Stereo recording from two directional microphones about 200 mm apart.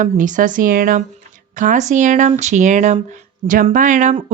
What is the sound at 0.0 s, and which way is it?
Speech, 40° right (ahead or behind).